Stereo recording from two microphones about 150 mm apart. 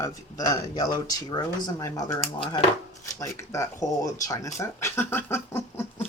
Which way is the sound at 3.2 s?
20° left (ahead or behind).